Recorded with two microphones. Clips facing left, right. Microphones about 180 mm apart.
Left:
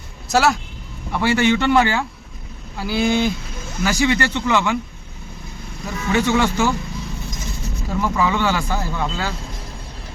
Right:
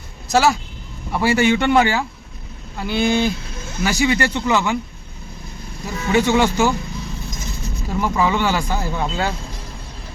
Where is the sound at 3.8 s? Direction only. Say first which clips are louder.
Even; 15° right (ahead or behind).